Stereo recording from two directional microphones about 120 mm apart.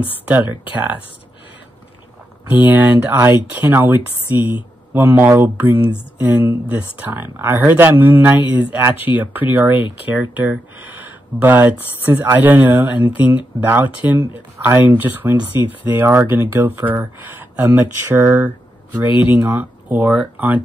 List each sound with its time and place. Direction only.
0.2 s speech: 15° right (ahead or behind)
2.5 s speech: 15° right (ahead or behind)